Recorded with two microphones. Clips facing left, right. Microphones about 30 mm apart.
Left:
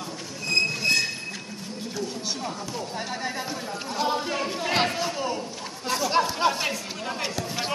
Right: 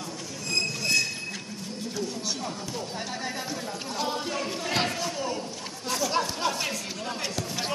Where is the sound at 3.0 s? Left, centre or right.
Centre.